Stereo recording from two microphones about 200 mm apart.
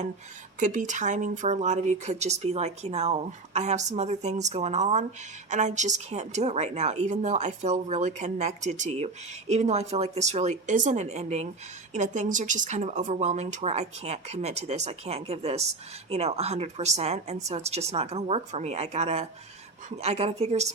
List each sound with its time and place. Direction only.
0.6 s speech: 40° right (ahead or behind)